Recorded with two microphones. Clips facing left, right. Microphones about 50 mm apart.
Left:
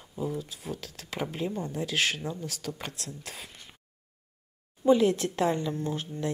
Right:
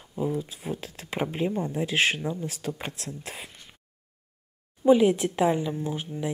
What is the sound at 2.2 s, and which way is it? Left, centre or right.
Speech, centre.